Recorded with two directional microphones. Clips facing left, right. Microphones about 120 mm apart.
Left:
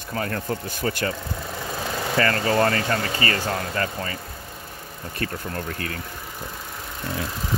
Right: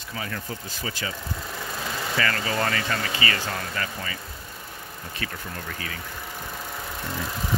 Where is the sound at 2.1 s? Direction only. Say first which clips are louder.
Left 6 dB; 40° left (ahead or behind).